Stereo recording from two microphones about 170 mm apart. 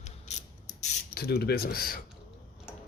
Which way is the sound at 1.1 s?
65° left (ahead or behind).